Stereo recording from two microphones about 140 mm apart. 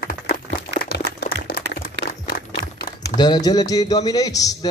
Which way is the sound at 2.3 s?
90° left.